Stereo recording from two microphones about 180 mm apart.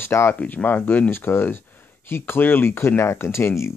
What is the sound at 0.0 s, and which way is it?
Speech, 15° left (ahead or behind).